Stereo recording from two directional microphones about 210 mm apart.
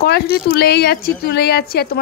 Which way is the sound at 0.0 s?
50° left (ahead or behind).